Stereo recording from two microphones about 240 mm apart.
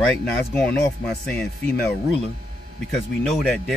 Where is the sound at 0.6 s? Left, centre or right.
Centre.